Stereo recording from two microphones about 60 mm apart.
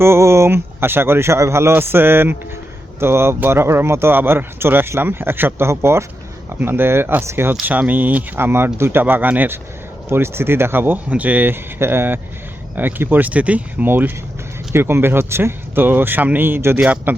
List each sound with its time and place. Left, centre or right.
0.0 s speech: right
6.6 s speech: right
7.6 s speech: right
10.1 s speech: right
11.8 s speech: right
13.8 s speech: right
16.8 s speech: right